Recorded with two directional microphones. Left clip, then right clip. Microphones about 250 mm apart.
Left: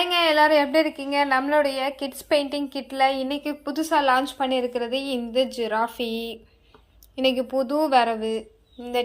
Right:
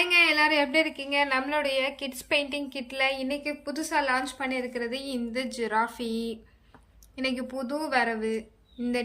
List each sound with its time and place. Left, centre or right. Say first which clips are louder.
0.0 s a woman's voice: left 3 dB; centre